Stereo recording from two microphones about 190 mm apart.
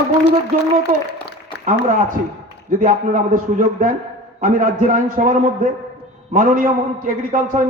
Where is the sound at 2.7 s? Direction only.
45° right (ahead or behind).